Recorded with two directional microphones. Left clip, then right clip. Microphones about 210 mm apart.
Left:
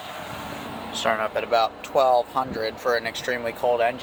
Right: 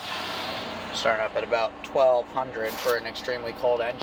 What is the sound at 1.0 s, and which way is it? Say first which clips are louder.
Speech: left 1 dB; 20° left (ahead or behind).